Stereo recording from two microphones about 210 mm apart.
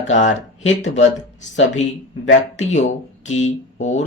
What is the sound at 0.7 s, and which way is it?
Speech, 35° left (ahead or behind).